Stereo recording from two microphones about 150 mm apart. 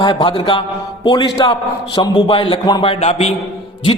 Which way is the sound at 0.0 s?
30° left (ahead or behind).